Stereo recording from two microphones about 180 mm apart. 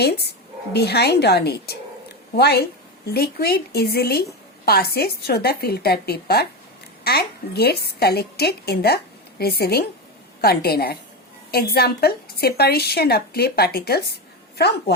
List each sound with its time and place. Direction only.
0.0 s a woman's voice: 65° left (ahead or behind)